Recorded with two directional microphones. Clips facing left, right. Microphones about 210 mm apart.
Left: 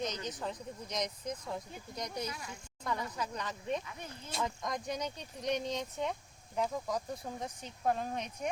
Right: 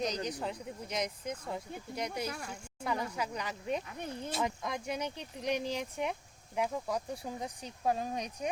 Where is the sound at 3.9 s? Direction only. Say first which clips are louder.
Right 7 dB; 60° right (ahead or behind).